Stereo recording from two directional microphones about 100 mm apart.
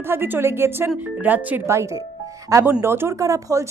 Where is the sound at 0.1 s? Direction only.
25° right (ahead or behind).